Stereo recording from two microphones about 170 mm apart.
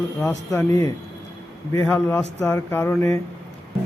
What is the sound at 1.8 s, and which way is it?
A man's voice, 10° left (ahead or behind).